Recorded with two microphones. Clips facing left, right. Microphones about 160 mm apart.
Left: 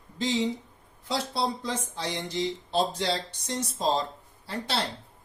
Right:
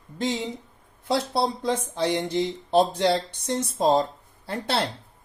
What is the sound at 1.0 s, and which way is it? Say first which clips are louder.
Speech: right 5 dB; 55° right (ahead or behind).